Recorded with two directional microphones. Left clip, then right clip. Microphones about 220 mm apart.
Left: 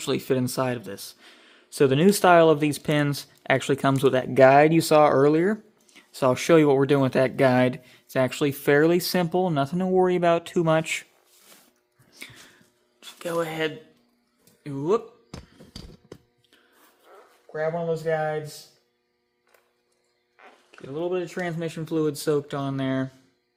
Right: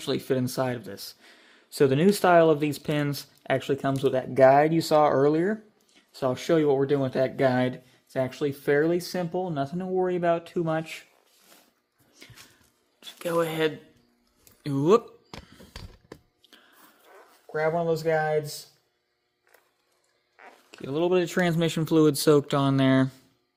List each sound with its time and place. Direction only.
0.0 s speech: 15° left (ahead or behind)
5.9 s speech: 30° left (ahead or behind)
13.0 s speech: 5° right (ahead or behind)
14.6 s speech: 40° right (ahead or behind)
17.5 s speech: 50° right (ahead or behind)
20.7 s speech: 50° right (ahead or behind)